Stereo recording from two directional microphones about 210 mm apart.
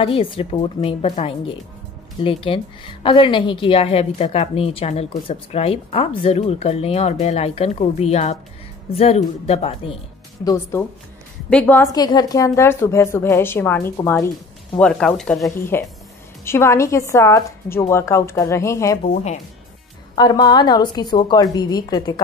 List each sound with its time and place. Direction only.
0.0 s a woman's voice: 25° left (ahead or behind)
10.4 s a woman's voice: 15° left (ahead or behind)
20.2 s a woman's voice: 20° left (ahead or behind)